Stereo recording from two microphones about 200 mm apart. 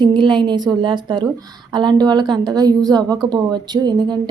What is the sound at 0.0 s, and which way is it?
Speech, 25° right (ahead or behind).